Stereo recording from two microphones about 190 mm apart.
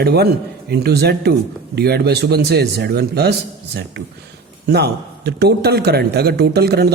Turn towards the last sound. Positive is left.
turn(degrees=-60)  # may be behind; listen again after turning